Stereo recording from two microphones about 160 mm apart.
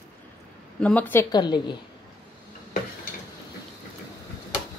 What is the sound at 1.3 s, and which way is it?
Speech, 25° left (ahead or behind).